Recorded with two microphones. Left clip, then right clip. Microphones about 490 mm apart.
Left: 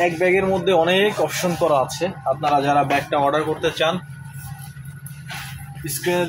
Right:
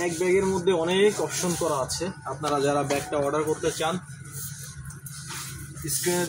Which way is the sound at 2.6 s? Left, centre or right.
Right.